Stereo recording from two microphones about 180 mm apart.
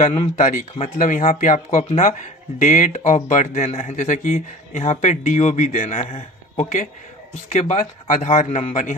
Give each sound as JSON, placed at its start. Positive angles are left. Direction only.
{"t": 0.0, "sound": "speech", "side_deg": 35}